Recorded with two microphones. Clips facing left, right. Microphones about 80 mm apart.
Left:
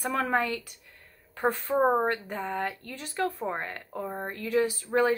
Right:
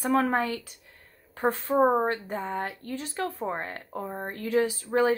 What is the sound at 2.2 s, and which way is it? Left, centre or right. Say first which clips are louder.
A woman's voice: even; right.